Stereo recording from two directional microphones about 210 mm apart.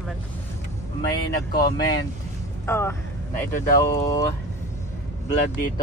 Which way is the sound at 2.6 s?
10° left (ahead or behind).